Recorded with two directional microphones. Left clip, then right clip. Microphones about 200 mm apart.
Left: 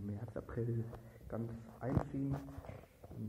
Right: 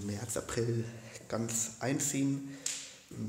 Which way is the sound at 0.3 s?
25° right (ahead or behind).